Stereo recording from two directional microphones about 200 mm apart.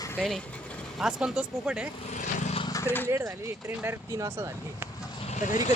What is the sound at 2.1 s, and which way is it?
Vehicle, 35° left (ahead or behind).